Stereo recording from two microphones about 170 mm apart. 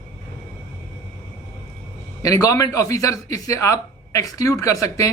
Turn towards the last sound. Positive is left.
turn(degrees=20)  # may be behind; listen again after turning